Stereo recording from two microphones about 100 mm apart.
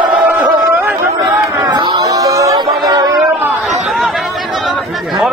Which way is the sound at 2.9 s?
40° right (ahead or behind).